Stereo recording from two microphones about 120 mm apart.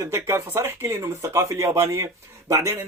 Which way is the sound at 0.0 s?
20° right (ahead or behind).